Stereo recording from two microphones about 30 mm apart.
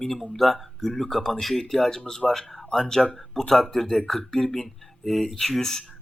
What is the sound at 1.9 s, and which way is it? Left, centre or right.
Speech, centre.